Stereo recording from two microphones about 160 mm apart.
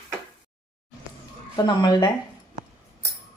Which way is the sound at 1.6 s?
25° left (ahead or behind).